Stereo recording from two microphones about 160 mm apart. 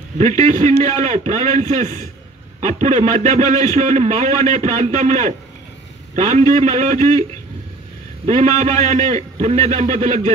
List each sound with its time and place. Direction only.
0.4 s a man's voice: 45° right (ahead or behind)
8.3 s a man's voice: 45° right (ahead or behind)